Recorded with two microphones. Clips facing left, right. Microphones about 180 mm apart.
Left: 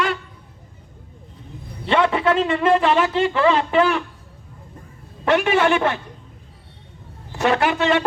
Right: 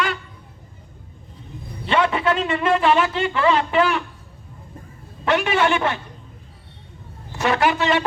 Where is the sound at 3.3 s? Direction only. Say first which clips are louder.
Left 1 dB; 25° left (ahead or behind).